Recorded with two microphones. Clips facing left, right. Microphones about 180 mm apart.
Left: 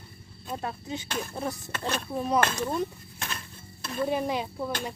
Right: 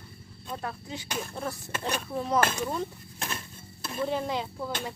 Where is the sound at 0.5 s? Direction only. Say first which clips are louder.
Left 3 dB; 25° left (ahead or behind).